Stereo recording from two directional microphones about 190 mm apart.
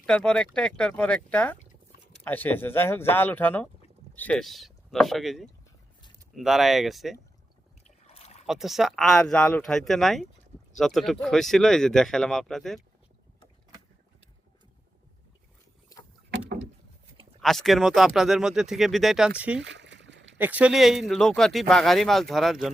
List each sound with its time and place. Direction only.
0.0 s speech: 5° left (ahead or behind)
8.0 s a sound: 30° left (ahead or behind)
8.4 s speech: centre (ahead or behind)
17.4 s speech: centre (ahead or behind)
19.6 s a sound: 70° right (ahead or behind)
20.4 s speech: 5° right (ahead or behind)